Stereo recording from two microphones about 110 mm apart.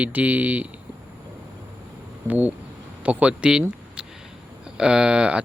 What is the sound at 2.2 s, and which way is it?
Speech, 15° right (ahead or behind).